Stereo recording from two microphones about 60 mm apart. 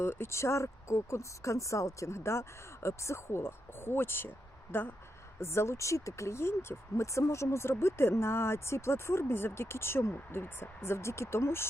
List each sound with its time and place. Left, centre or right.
0.0 s speech: left
5.4 s speech: left